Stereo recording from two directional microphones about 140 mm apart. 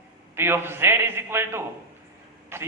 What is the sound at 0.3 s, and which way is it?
A man's voice, 15° right (ahead or behind).